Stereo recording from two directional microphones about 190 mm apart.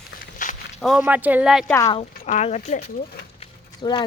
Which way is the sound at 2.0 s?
35° left (ahead or behind).